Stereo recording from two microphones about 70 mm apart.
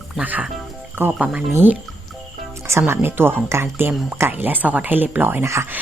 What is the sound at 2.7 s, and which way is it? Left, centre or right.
Speech, right.